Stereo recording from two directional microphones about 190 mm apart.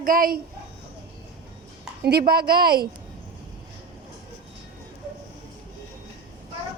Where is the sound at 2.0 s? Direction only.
55° right (ahead or behind).